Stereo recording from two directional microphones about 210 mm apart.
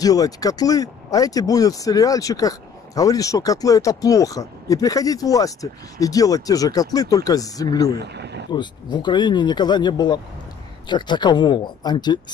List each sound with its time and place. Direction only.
0.0 s speech: 15° left (ahead or behind)
8.0 s speech: 50° right (ahead or behind)
8.5 s speech: 20° left (ahead or behind)